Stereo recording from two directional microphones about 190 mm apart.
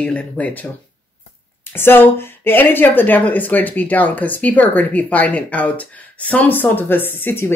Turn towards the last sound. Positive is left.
turn(degrees=10)  # may be behind; listen again after turning